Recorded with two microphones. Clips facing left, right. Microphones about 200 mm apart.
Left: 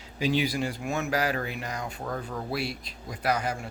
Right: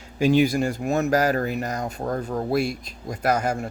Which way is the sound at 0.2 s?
50° right (ahead or behind).